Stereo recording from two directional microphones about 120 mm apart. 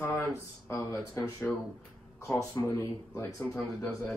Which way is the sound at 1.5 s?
Centre (ahead or behind).